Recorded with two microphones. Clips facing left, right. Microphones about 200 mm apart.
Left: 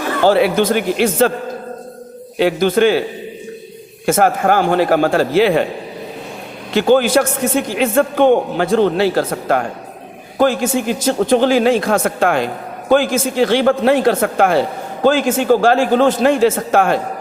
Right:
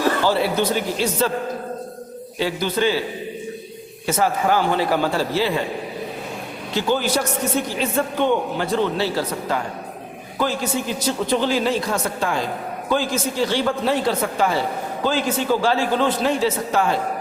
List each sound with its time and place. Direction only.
0.3 s speech: 70° left (ahead or behind)
2.4 s speech: 55° left (ahead or behind)
4.0 s a man's voice: 55° left (ahead or behind)
6.7 s speech: 60° left (ahead or behind)
7.4 s speech: 90° left
7.9 s a man's voice: 50° left (ahead or behind)
12.0 s a man's voice: 65° left (ahead or behind)